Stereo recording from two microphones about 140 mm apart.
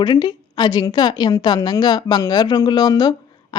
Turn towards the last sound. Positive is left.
turn(degrees=30)  # may be behind; listen again after turning